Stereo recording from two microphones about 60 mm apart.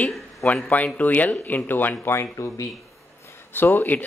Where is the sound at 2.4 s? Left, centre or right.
Left.